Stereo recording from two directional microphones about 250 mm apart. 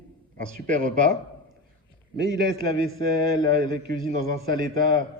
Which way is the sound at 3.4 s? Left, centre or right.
Centre.